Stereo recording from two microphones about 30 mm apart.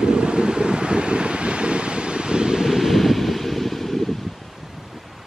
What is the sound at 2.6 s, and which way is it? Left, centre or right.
Waves, centre.